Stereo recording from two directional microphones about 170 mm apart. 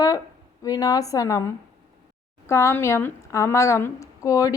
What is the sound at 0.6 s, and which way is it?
Speech, 20° left (ahead or behind).